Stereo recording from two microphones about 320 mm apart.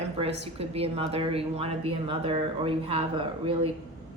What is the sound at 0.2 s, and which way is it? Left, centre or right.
A woman's voice, centre.